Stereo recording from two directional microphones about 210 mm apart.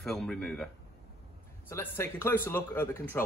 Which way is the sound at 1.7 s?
10° left (ahead or behind).